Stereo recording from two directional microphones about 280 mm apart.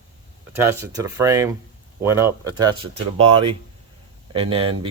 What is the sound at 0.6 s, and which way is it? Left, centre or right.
Speech, centre.